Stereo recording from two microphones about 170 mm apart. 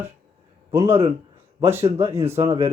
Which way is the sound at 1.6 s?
15° right (ahead or behind).